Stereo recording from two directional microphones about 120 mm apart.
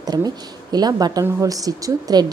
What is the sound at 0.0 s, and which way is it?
A woman's voice, 35° right (ahead or behind).